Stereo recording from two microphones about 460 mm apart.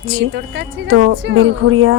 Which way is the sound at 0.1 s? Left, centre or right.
Right.